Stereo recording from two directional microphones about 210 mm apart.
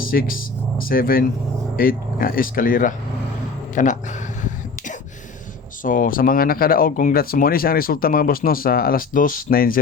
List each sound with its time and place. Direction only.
0.0 s speech: 45° left (ahead or behind)
5.8 s speech: 40° left (ahead or behind)